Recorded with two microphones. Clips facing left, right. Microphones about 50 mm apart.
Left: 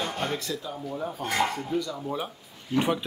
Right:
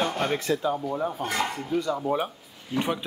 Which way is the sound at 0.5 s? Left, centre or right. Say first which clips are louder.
Right 9 dB; right.